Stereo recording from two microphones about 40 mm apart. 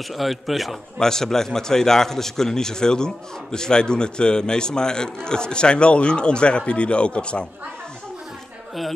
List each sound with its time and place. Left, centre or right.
0.1 s a man's voice: centre
0.9 s a man's voice: centre